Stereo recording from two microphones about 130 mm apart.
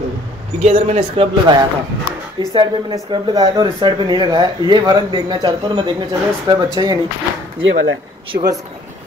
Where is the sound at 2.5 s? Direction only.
35° right (ahead or behind).